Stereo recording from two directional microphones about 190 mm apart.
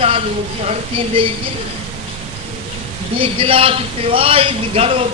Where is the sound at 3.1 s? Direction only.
30° right (ahead or behind).